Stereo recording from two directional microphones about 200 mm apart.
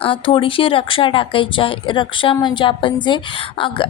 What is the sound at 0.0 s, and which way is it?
Speech, 25° left (ahead or behind).